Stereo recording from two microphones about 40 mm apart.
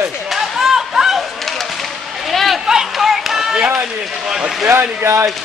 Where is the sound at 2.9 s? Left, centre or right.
Centre.